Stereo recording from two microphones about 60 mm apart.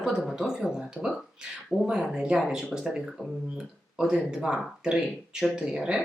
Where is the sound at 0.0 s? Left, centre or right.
Centre.